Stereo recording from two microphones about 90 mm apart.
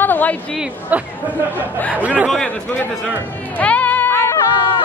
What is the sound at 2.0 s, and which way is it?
Speech, 15° right (ahead or behind).